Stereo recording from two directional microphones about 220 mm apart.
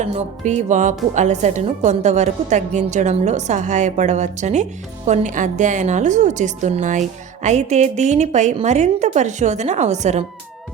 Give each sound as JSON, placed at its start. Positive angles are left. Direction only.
{"t": 0.0, "sound": "a woman's voice", "side_deg": -30}